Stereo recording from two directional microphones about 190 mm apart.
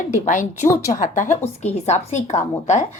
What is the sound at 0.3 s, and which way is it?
Speech, 40° left (ahead or behind).